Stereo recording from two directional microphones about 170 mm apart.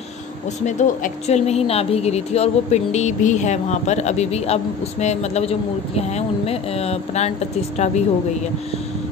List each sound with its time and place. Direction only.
0.7 s a woman's voice: 45° left (ahead or behind)